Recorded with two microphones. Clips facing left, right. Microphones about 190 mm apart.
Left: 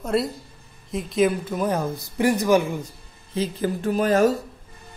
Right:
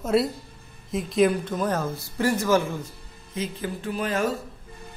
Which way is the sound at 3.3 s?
35° left (ahead or behind).